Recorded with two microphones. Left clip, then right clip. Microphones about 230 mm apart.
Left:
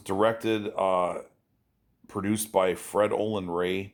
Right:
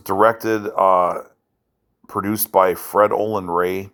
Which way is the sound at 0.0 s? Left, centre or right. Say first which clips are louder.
Right 9 dB; centre.